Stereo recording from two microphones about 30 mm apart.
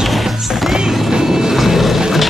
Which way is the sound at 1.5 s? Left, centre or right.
Centre.